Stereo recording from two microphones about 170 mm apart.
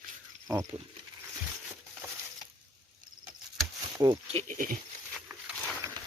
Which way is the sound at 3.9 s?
25° right (ahead or behind).